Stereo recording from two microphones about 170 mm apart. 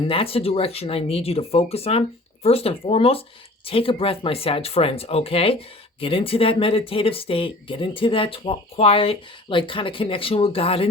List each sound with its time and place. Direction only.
0.1 s speech: 35° left (ahead or behind)